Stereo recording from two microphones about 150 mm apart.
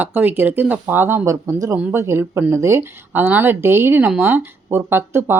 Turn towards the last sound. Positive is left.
turn(degrees=-15)  # may be behind; listen again after turning